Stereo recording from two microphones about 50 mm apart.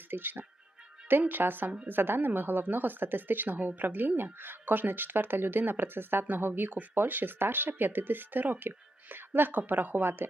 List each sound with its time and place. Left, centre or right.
0.1 s speech: right